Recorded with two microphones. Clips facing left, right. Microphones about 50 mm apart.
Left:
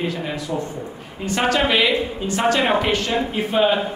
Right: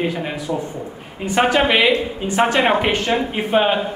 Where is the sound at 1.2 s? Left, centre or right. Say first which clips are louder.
Right 3 dB; centre.